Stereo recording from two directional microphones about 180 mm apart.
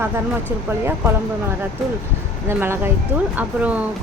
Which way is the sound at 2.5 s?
15° right (ahead or behind).